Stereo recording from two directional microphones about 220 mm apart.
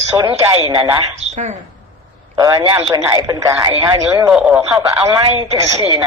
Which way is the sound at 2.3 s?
20° right (ahead or behind).